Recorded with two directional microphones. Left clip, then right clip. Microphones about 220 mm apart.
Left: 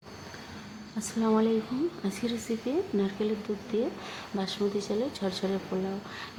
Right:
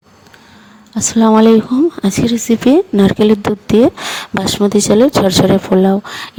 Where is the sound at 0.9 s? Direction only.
40° right (ahead or behind).